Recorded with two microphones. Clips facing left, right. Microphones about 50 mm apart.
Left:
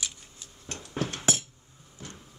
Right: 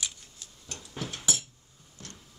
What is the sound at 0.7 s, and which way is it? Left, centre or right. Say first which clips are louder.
Music: left 6 dB; left.